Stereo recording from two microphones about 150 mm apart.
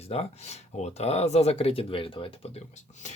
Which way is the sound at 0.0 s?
45° left (ahead or behind).